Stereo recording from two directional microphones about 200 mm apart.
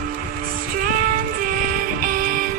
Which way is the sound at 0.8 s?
45° right (ahead or behind).